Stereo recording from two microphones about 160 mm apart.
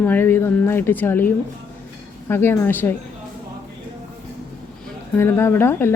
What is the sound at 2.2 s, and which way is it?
Speech, 15° left (ahead or behind).